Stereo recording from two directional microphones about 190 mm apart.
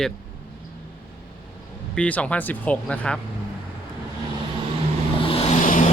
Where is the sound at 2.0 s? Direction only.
5° left (ahead or behind).